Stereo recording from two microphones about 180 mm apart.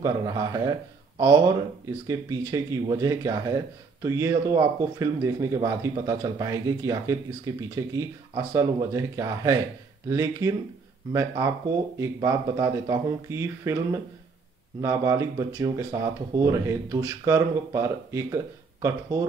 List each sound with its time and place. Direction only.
0.0 s speech: 20° right (ahead or behind)
2.0 s speech: 15° right (ahead or behind)
14.8 s speech: 15° right (ahead or behind)